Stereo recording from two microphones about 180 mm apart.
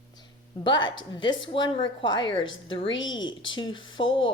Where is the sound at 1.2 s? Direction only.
25° left (ahead or behind).